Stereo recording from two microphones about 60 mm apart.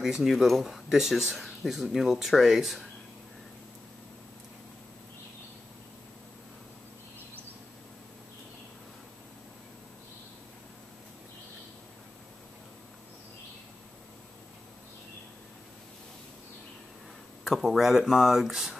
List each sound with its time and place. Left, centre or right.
0.0 s speech: centre
17.5 s speech: centre